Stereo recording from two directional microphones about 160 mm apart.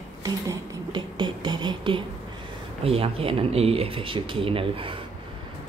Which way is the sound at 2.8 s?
35° right (ahead or behind).